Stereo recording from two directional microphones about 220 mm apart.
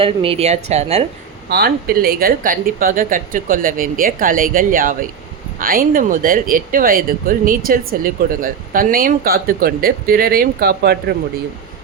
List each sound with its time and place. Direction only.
0.0 s speech: 25° right (ahead or behind)
1.5 s speech: 45° right (ahead or behind)